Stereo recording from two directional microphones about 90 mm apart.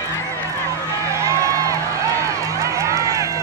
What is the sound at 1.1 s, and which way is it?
Music, 35° right (ahead or behind).